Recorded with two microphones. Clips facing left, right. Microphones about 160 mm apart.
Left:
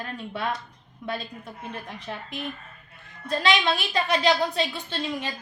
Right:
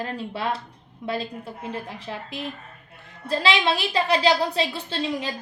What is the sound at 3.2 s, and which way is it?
Speech, 30° right (ahead or behind).